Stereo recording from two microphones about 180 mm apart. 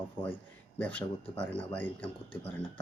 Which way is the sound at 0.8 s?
10° left (ahead or behind).